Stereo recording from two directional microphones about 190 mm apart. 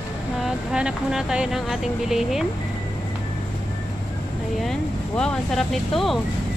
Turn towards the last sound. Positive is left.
turn(degrees=0)  # may be behind; listen again after turning